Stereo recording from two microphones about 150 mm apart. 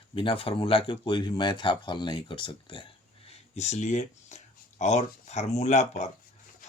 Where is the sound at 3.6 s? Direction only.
50° left (ahead or behind).